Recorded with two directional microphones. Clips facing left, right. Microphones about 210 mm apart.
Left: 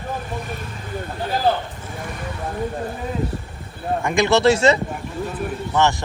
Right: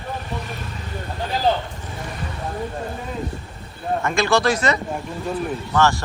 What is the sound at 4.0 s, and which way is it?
Speech, 15° left (ahead or behind).